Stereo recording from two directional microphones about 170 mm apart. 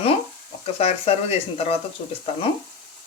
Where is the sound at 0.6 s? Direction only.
40° left (ahead or behind).